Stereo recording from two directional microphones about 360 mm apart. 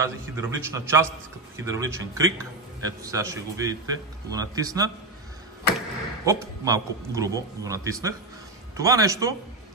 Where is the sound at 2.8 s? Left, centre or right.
Centre.